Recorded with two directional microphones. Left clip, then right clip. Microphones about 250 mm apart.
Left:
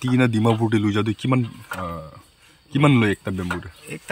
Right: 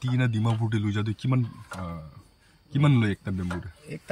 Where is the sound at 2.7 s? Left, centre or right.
Centre.